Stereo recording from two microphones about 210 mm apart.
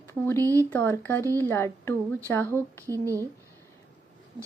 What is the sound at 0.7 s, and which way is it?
Speech, 10° left (ahead or behind).